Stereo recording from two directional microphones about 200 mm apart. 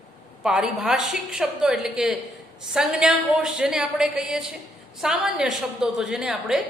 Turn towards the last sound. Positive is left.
turn(degrees=0)  # may be behind; listen again after turning